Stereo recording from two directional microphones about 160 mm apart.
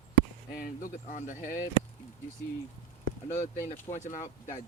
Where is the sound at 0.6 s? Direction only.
55° left (ahead or behind).